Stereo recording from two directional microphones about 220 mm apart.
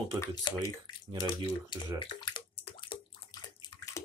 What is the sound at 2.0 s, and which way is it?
Bathtub, 20° left (ahead or behind).